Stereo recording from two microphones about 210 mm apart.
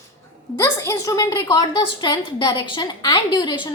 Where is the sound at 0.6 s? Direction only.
15° left (ahead or behind).